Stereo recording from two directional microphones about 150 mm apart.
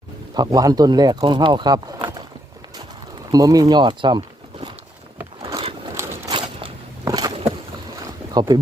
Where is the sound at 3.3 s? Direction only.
25° right (ahead or behind).